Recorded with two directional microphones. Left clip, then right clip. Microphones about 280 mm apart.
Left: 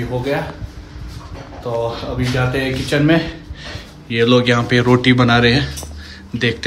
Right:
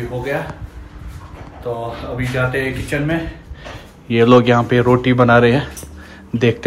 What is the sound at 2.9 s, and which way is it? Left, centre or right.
Speech, centre.